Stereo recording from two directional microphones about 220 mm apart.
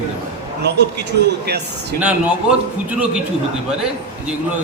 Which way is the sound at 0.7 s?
50° right (ahead or behind).